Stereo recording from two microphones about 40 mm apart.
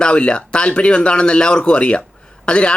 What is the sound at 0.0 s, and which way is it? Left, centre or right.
Speech, left.